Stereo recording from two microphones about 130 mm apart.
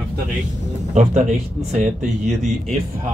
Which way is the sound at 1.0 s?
55° right (ahead or behind).